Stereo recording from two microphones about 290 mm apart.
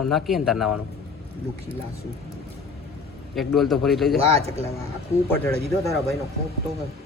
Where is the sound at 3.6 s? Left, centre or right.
Centre.